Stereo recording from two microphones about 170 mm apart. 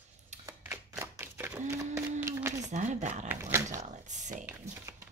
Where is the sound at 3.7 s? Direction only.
45° right (ahead or behind).